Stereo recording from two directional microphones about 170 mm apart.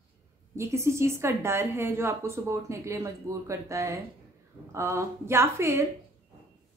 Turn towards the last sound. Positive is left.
turn(degrees=-15)  # may be behind; listen again after turning